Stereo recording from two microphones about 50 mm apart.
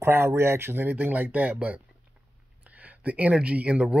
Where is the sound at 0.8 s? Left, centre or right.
Right.